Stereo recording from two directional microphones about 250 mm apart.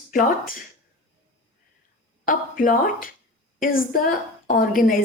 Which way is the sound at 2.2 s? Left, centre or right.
Left.